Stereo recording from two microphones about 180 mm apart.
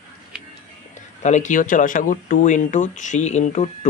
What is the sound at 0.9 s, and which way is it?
Speech, 40° left (ahead or behind).